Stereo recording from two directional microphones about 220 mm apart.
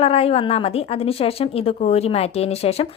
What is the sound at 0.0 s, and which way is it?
Speech, 25° left (ahead or behind).